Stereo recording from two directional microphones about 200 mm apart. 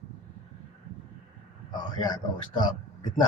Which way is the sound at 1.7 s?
20° left (ahead or behind).